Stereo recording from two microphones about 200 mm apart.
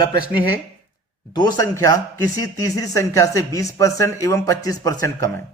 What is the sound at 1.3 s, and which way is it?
Speech, 20° left (ahead or behind).